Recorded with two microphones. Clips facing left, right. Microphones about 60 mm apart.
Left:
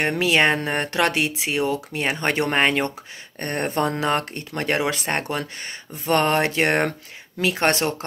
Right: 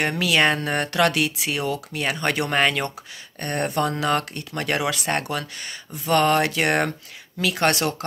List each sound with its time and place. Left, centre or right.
0.0 s speech: left